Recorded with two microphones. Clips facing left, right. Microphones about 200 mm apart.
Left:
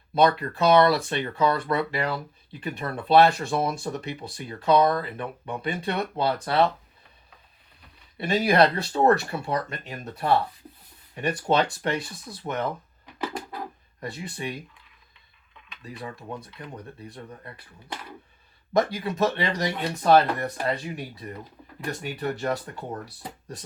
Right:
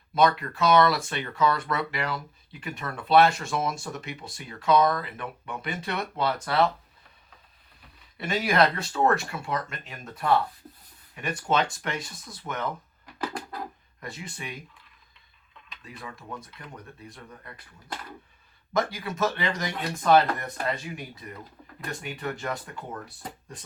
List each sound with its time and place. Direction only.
0.1 s speech: 30° left (ahead or behind)
8.2 s speech: 35° left (ahead or behind)
13.1 s a sound: 5° left (ahead or behind)
14.0 s speech: 30° left (ahead or behind)
16.0 s speech: 35° left (ahead or behind)
18.7 s speech: 35° left (ahead or behind)